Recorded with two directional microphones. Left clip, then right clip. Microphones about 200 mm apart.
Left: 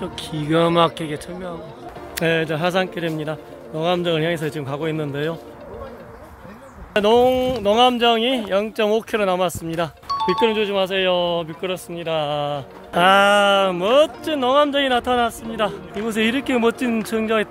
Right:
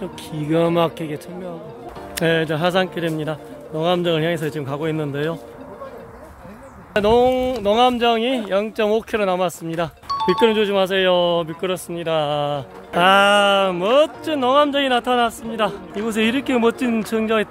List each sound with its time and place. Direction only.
0.0 s speech: centre (ahead or behind)
2.1 s speech: 15° right (ahead or behind)
6.9 s speech: centre (ahead or behind)
10.4 s speech: 25° right (ahead or behind)
12.9 s speech: centre (ahead or behind)